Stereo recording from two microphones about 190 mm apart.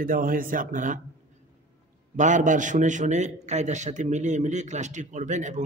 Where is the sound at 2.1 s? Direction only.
40° right (ahead or behind).